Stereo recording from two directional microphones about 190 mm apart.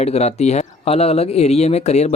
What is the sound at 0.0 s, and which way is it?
Speech, 35° left (ahead or behind).